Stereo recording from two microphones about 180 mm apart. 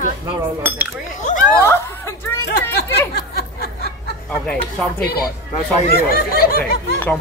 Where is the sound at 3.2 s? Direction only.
60° left (ahead or behind).